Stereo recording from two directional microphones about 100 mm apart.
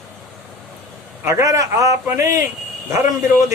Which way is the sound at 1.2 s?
30° right (ahead or behind).